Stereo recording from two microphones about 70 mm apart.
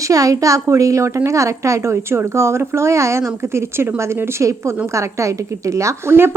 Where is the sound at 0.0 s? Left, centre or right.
Right.